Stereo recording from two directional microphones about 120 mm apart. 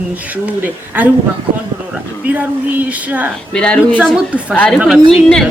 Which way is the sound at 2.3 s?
10° right (ahead or behind).